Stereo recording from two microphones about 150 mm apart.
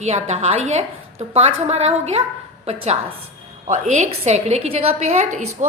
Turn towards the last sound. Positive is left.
turn(degrees=-50)  # may be behind; listen again after turning